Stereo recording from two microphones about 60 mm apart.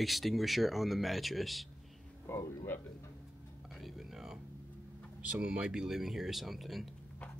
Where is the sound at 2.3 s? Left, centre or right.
Left.